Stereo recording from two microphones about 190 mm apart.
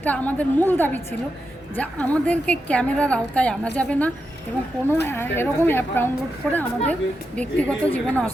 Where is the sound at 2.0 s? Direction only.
5° left (ahead or behind).